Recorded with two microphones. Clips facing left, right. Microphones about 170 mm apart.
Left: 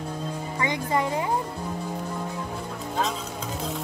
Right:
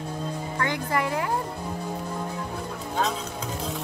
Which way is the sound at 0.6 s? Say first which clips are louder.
Left 1 dB; 20° left (ahead or behind).